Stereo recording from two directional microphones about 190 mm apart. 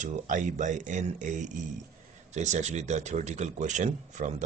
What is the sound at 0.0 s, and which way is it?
Speech, 40° right (ahead or behind).